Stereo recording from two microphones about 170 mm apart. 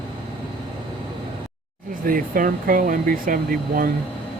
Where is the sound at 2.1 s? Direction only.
55° right (ahead or behind).